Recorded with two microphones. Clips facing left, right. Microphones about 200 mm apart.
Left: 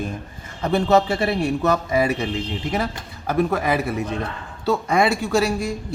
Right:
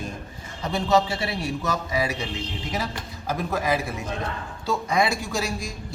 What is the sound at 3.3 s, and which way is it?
A man's voice, 60° left (ahead or behind).